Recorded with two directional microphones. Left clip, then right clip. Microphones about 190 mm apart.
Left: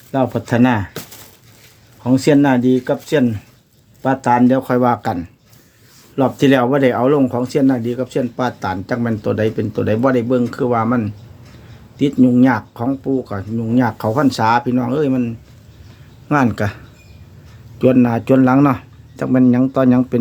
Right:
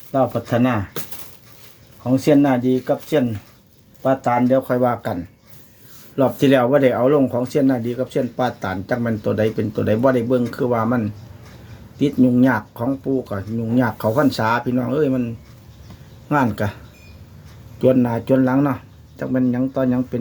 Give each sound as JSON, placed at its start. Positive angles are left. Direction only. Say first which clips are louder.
{"t": 0.1, "sound": "speech", "louder": "left 1 dB", "side_deg": 40}
{"t": 2.0, "sound": "speech", "louder": "left 2 dB", "side_deg": 45}
{"t": 6.1, "sound": "speech", "louder": "left 2 dB", "side_deg": 15}
{"t": 16.3, "sound": "speech", "louder": "left 3 dB", "side_deg": 25}
{"t": 17.7, "sound": "speech", "louder": "left 3 dB", "side_deg": 20}